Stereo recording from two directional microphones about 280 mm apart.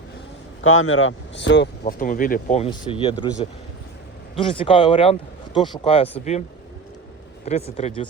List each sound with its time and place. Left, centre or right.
0.6 s speech: left
1.8 s speech: left
7.4 s speech: left